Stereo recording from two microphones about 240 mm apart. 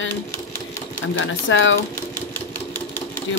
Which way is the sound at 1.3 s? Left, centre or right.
Left.